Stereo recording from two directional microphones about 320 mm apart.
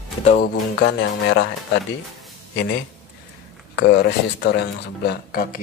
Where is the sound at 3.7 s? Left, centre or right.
Left.